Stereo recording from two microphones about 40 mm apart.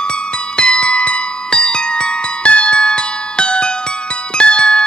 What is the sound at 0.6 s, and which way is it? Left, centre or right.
Music, left.